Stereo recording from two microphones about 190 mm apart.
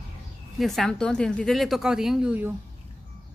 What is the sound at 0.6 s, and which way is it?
A woman's voice, centre (ahead or behind).